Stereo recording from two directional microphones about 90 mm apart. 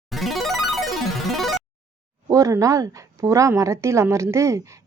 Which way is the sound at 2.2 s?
35° right (ahead or behind).